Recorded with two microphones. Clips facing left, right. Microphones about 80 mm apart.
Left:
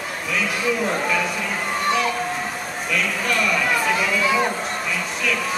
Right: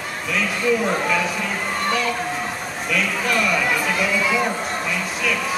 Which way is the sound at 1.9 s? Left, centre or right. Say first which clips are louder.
Left 2 dB; centre.